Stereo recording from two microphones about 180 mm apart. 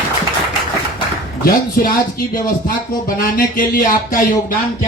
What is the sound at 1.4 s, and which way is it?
Speech, 50° left (ahead or behind).